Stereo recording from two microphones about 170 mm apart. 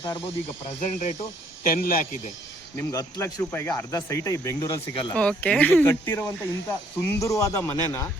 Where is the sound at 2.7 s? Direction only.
20° left (ahead or behind).